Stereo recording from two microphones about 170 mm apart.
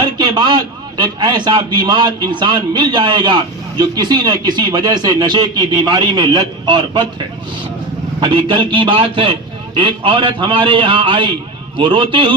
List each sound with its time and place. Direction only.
0.2 s a man's voice: 25° right (ahead or behind)
8.2 s a man's voice: 30° right (ahead or behind)